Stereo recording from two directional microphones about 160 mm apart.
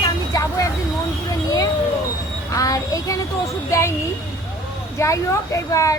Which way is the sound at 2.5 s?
20° left (ahead or behind).